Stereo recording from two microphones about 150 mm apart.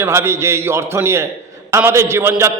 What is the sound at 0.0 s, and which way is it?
A man's voice, 15° right (ahead or behind).